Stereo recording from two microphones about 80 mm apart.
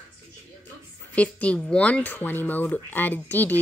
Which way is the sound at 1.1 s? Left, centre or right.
Centre.